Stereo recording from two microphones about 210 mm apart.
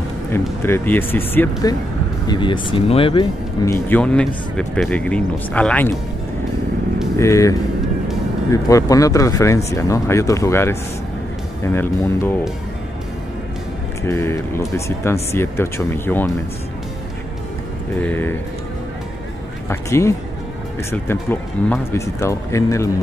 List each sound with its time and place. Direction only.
0.7 s speech: 10° left (ahead or behind)
2.2 s speech: 20° left (ahead or behind)
3.6 s speech: 10° left (ahead or behind)
7.2 s speech: 15° left (ahead or behind)
14.0 s speech: 10° left (ahead or behind)
17.9 s speech: 10° left (ahead or behind)
19.7 s speech: 15° left (ahead or behind)